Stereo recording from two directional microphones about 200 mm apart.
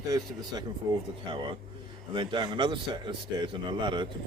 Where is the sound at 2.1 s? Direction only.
25° right (ahead or behind).